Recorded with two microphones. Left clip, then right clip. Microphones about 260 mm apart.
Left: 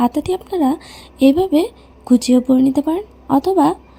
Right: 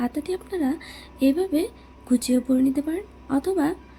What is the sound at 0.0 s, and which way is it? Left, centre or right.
Speech, left.